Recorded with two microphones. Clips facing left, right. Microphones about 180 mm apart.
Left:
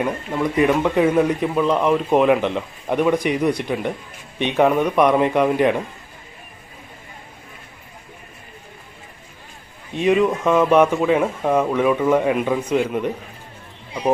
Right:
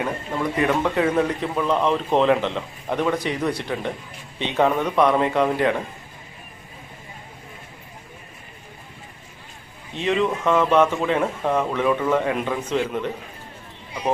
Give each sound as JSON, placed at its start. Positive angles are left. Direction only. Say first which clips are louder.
{"t": 0.6, "sound": "speech", "louder": "left 4 dB", "side_deg": 15}
{"t": 9.9, "sound": "speech", "louder": "left 5 dB", "side_deg": 15}